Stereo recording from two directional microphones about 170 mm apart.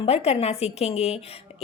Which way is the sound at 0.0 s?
40° left (ahead or behind).